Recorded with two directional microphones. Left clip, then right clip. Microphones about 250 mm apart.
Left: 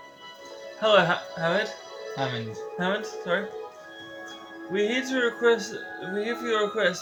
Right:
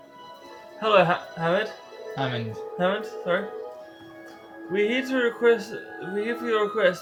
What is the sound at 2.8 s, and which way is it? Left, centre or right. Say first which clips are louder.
Speech: right 3 dB; centre.